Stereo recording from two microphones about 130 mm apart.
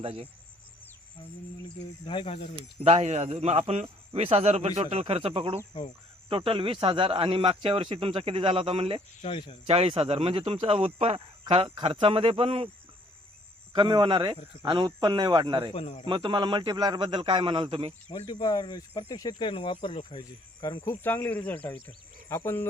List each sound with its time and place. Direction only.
0.0 s speech: 50° right (ahead or behind)
2.0 s speech: 45° left (ahead or behind)
2.6 s speech: 50° right (ahead or behind)
9.2 s speech: 45° left (ahead or behind)
9.6 s speech: 45° right (ahead or behind)
13.7 s a man's voice: 40° right (ahead or behind)
15.7 s speech: 45° left (ahead or behind)
16.0 s a man's voice: 40° right (ahead or behind)
18.3 s speech: 30° left (ahead or behind)
20.6 s speech: 25° left (ahead or behind)
21.0 s speech: 15° left (ahead or behind)